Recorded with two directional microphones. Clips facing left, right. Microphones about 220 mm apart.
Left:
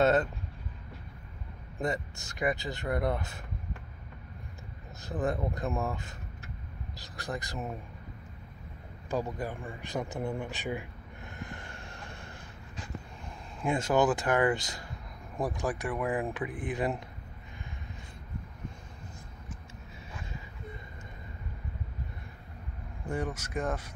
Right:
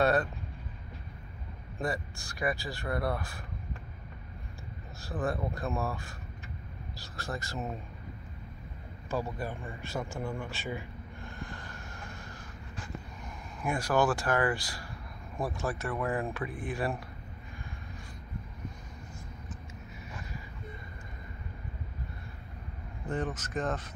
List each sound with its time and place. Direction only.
0.0 s vehicle: 20° left (ahead or behind)
1.8 s speech: 20° left (ahead or behind)
5.0 s speech: 20° left (ahead or behind)
9.1 s speech: 15° left (ahead or behind)
11.4 s vehicle: 25° left (ahead or behind)
13.6 s speech: 20° left (ahead or behind)
23.0 s speech: 10° left (ahead or behind)